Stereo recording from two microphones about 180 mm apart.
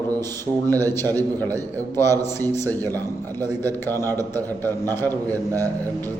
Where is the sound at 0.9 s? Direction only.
15° left (ahead or behind).